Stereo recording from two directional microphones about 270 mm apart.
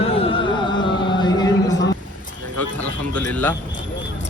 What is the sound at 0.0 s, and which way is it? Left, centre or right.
Music, left.